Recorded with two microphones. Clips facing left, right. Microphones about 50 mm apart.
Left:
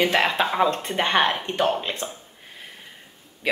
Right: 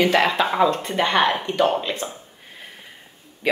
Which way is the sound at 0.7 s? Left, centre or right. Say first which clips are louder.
Right 2 dB; left.